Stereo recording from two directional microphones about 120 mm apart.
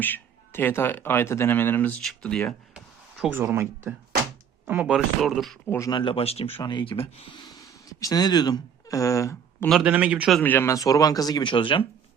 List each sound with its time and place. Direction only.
0.0 s speech: 15° left (ahead or behind)
2.7 s a sound: 5° right (ahead or behind)
3.3 s speech: 20° right (ahead or behind); by 5.5 s centre (ahead or behind)
5.6 s speech: 20° left (ahead or behind)
5.9 s speech: 45° left (ahead or behind)
6.6 s speech: 40° left (ahead or behind)
7.3 s speech: 30° left (ahead or behind)
9.6 s speech: centre (ahead or behind)
9.9 s a man's voice: 10° right (ahead or behind)
10.4 s speech: 15° left (ahead or behind); by 11.9 s 45° left (ahead or behind)